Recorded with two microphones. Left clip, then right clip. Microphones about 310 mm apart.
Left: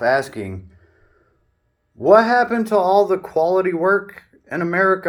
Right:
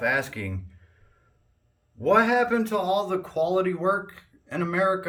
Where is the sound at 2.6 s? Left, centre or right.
Centre.